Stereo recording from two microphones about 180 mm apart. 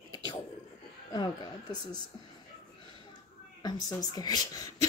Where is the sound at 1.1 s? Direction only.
25° left (ahead or behind).